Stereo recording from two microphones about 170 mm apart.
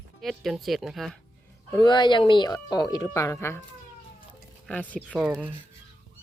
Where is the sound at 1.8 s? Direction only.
25° left (ahead or behind).